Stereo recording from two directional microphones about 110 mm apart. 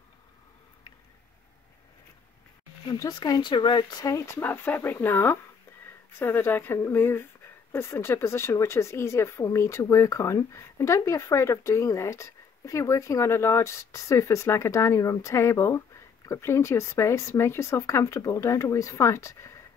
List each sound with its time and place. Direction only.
2.9 s speech: 40° left (ahead or behind)